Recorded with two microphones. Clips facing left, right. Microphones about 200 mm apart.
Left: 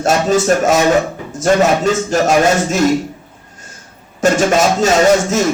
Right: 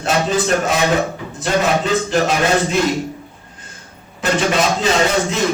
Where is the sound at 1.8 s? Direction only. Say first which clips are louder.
Left 3 dB; 45° left (ahead or behind).